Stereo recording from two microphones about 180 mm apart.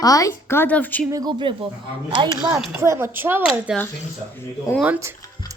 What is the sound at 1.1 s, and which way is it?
Speech, 25° right (ahead or behind).